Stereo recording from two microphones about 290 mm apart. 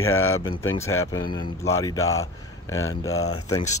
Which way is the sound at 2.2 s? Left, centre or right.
Left.